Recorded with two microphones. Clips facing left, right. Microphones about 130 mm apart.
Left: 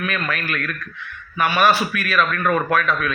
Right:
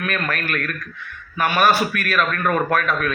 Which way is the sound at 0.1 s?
45° right (ahead or behind).